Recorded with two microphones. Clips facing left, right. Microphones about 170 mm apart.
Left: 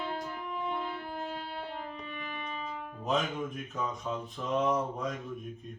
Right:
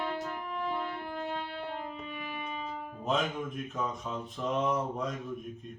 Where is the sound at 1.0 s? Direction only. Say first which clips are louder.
Right 2 dB; 60° right (ahead or behind).